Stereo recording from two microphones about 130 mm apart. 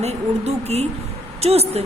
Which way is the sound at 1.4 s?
55° right (ahead or behind).